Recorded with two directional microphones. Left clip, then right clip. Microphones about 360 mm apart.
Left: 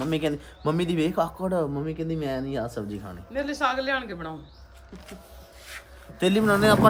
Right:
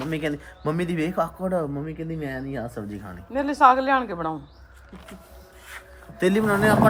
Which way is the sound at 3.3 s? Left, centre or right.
Centre.